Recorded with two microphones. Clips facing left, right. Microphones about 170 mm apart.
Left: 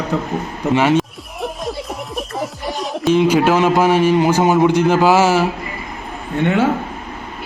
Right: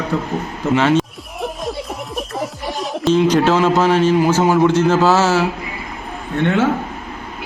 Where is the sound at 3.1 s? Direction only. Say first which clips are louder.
Even; 10° left (ahead or behind).